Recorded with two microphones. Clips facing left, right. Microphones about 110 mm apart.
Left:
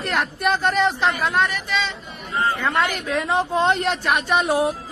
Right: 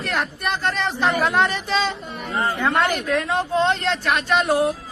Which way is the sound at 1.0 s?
Centre (ahead or behind).